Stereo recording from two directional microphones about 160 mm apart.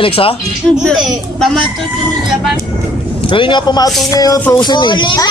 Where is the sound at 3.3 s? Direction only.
30° left (ahead or behind).